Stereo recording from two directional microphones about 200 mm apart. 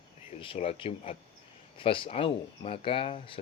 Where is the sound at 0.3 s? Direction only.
30° left (ahead or behind).